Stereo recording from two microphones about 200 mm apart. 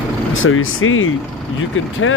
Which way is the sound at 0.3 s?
80° left.